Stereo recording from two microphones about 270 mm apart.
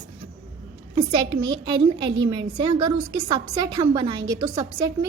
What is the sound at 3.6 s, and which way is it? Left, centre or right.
A woman's voice, centre.